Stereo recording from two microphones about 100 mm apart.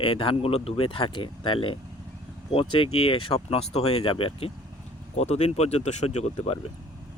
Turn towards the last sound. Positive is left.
turn(degrees=90)